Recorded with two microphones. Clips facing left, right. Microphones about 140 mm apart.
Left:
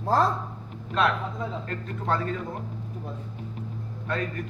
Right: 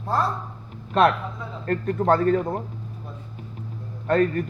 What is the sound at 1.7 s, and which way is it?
Speech, 50° right (ahead or behind).